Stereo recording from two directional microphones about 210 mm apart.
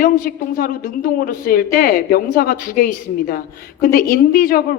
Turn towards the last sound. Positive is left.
turn(degrees=45)  # may be behind; listen again after turning